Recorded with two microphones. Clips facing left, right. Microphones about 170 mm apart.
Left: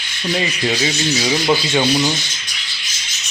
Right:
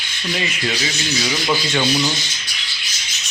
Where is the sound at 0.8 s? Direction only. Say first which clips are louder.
Left 4 dB; 20° left (ahead or behind).